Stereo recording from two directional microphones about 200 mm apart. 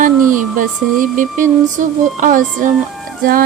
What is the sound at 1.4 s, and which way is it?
Music, 40° right (ahead or behind).